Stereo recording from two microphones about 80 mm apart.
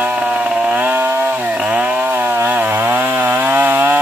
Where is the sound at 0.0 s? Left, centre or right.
Centre.